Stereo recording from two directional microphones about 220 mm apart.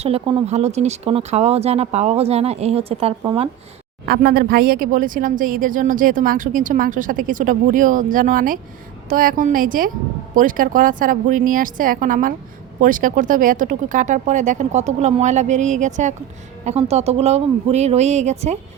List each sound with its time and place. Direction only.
0.0 s speech: 25° right (ahead or behind)
4.0 s speech: 45° right (ahead or behind)